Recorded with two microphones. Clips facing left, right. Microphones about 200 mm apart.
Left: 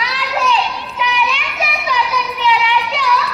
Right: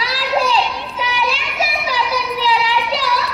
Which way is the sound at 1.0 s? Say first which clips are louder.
Left 2 dB; 35° right (ahead or behind).